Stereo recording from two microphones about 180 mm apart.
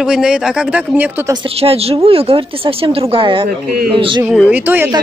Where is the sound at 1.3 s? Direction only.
30° right (ahead or behind).